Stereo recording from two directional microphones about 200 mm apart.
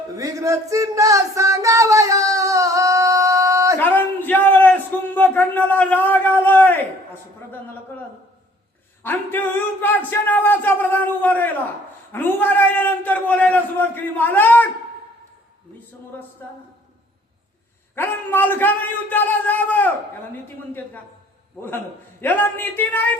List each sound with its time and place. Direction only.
0.2 s a sound: 15° right (ahead or behind)
3.8 s a sound: 10° left (ahead or behind)
9.0 s a man's voice: 10° left (ahead or behind)
16.4 s a man's voice: 10° left (ahead or behind)
17.9 s a man's voice: 10° left (ahead or behind)
22.2 s a man's voice: 10° left (ahead or behind)